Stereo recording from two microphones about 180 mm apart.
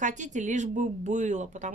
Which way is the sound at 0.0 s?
40° right (ahead or behind).